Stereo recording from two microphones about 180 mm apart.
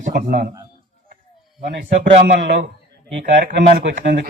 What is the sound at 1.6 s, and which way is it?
A man's voice, 55° right (ahead or behind).